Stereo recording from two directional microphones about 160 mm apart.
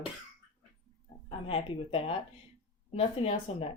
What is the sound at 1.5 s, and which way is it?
Speech, 35° left (ahead or behind).